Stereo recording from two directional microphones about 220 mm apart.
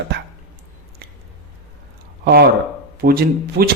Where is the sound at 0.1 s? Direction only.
50° right (ahead or behind).